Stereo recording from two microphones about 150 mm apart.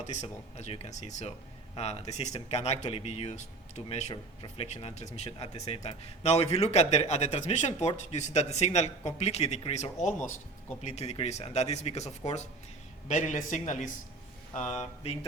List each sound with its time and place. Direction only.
0.0 s a man's voice: 50° left (ahead or behind)